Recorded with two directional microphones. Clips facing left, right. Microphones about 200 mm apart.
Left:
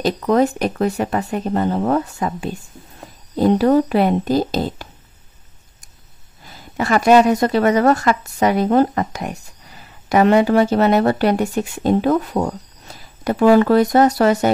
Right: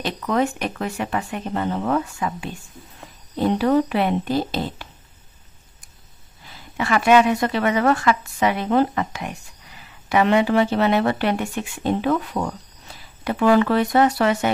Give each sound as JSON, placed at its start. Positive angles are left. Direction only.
{"t": 0.0, "sound": "a woman's voice", "side_deg": 40}
{"t": 6.4, "sound": "a woman's voice", "side_deg": 40}